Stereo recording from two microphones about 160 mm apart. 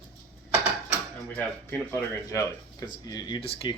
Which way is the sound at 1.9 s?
10° left (ahead or behind).